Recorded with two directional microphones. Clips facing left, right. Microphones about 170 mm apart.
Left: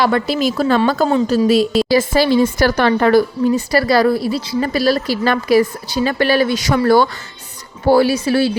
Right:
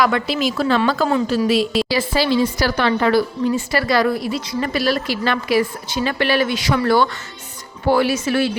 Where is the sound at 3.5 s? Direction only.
35° left (ahead or behind).